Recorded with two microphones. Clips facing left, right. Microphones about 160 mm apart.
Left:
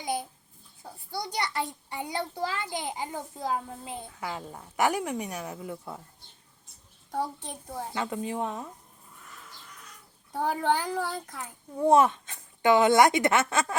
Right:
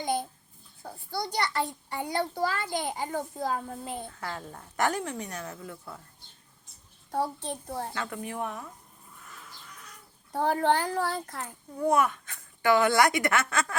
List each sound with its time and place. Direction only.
0.0 s babbling: 5° left (ahead or behind)
1.1 s a child's voice: 15° left (ahead or behind)
7.3 s a child's voice: 15° left (ahead or behind)
10.4 s a woman's voice: 15° left (ahead or behind)
11.3 s a child's voice: 25° left (ahead or behind)